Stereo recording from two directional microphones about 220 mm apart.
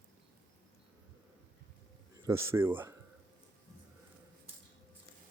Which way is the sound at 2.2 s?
10° right (ahead or behind).